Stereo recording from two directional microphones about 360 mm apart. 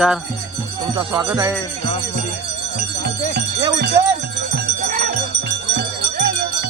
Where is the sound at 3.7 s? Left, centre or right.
Right.